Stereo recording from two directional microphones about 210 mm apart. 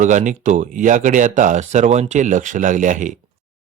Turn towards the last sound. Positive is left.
turn(degrees=-35)  # may be behind; listen again after turning